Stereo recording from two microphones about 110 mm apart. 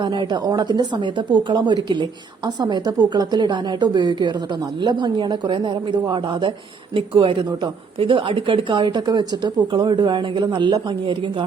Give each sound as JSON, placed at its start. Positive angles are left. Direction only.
{"t": 0.0, "sound": "a woman's voice", "side_deg": -45}